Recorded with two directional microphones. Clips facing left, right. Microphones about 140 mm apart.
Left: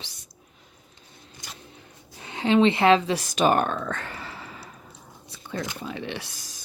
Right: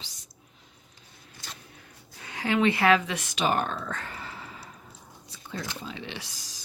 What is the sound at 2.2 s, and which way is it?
Speech, 25° left (ahead or behind).